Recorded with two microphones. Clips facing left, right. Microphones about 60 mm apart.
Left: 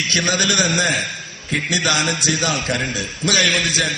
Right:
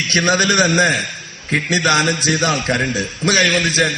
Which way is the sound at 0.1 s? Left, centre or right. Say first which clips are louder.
Right 6 dB; right.